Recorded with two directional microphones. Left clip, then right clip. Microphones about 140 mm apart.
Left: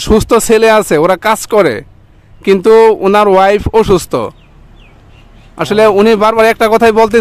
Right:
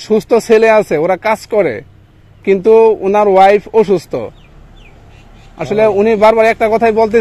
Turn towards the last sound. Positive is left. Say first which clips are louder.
# left 3 dB
turn(degrees=40)  # may be behind; listen again after turning